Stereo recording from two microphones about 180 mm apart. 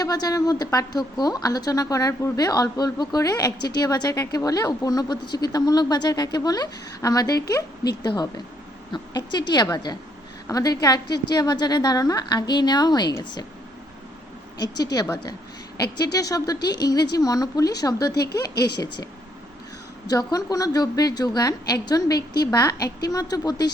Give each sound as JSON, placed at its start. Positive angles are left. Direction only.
{"t": 0.0, "sound": "a woman's voice", "side_deg": 20}
{"t": 14.6, "sound": "a woman's voice", "side_deg": 20}
{"t": 18.5, "sound": "speech", "side_deg": 65}
{"t": 20.1, "sound": "a woman's voice", "side_deg": 20}